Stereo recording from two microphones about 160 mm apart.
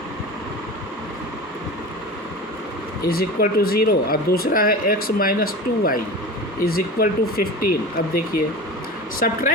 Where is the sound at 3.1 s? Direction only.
70° left (ahead or behind).